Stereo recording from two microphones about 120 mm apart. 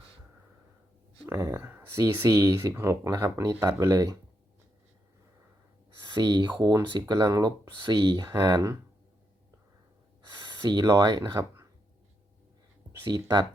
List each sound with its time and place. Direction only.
1.3 s speech: 20° right (ahead or behind)
6.1 s speech: 40° right (ahead or behind)
8.2 s speech: 25° right (ahead or behind)
10.4 s speech: 40° right (ahead or behind)
11.3 s a sound: 25° right (ahead or behind)